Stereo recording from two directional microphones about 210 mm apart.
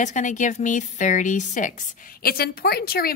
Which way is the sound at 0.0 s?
35° left (ahead or behind).